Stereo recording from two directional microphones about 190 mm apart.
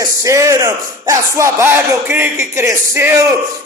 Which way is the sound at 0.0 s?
15° right (ahead or behind).